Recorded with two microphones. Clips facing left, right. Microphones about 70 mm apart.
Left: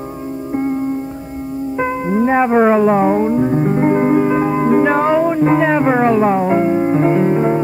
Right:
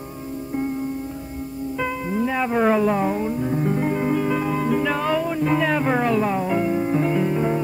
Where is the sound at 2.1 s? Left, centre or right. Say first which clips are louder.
Left 9 dB; left.